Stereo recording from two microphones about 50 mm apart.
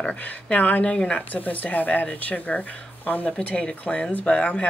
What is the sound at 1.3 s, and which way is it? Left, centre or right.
Speech, left.